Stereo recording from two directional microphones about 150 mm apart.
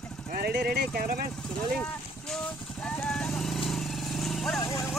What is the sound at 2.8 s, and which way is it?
Vehicle, 5° left (ahead or behind).